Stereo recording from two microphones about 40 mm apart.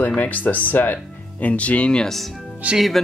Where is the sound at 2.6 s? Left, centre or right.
Right.